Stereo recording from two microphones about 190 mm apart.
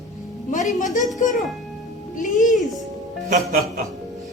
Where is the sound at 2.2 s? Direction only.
40° left (ahead or behind).